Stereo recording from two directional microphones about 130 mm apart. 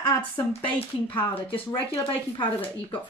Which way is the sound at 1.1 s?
40° left (ahead or behind).